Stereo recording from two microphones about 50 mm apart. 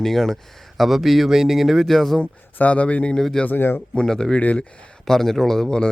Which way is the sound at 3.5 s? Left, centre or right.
Left.